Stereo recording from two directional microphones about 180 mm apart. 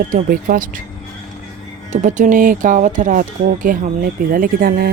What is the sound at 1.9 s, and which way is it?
Speech, 45° right (ahead or behind).